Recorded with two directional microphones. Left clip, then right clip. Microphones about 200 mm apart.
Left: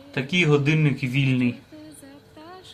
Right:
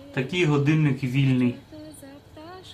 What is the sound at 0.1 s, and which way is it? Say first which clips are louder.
Speech: left 3 dB; 25° left (ahead or behind).